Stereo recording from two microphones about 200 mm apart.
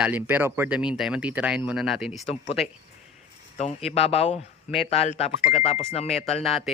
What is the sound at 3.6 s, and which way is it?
Speech, 35° left (ahead or behind).